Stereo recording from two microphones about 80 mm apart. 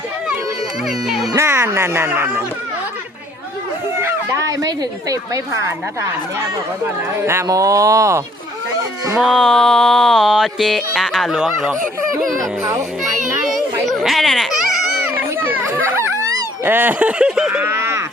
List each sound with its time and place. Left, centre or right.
0.9 s music: centre
1.4 s speech: right
4.0 s speech: right
6.8 s speech: right
7.4 s speech: right
9.1 s music: centre
11.3 s a sound: centre
13.0 s children playing: centre
15.1 s children playing: right
16.6 s a sound: right; by 17.6 s centre
17.6 s a sound: right